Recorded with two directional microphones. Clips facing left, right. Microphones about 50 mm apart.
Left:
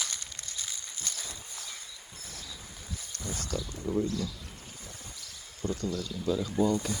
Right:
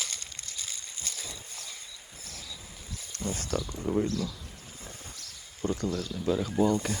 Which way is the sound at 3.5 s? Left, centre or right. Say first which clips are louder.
Right 2 dB; right.